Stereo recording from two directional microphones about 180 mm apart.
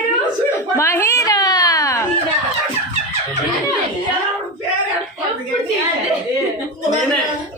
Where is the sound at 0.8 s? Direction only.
15° left (ahead or behind).